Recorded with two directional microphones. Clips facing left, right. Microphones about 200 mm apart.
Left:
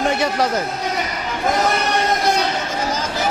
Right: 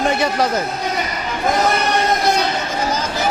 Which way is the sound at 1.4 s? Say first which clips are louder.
Right 2 dB; 15° right (ahead or behind).